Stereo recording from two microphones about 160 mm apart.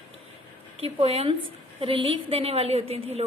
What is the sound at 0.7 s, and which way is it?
A woman's voice, 40° right (ahead or behind).